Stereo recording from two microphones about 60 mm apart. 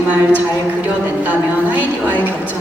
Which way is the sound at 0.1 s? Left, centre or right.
Right.